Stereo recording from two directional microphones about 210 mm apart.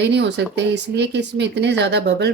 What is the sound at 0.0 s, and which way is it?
A woman's voice, 55° right (ahead or behind).